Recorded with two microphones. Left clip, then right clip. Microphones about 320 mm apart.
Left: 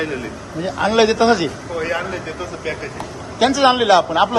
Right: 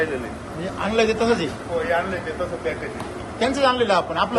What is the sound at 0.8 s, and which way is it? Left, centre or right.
Speech, centre.